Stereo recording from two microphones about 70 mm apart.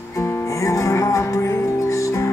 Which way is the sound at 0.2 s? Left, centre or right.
Left.